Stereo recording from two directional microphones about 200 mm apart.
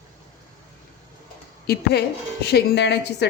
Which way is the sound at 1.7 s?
50° left (ahead or behind).